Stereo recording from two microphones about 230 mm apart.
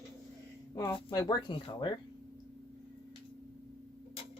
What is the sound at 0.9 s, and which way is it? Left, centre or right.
Speech, centre.